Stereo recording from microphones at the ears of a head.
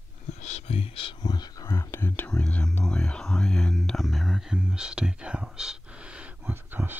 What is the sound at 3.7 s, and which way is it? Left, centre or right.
Speech, centre.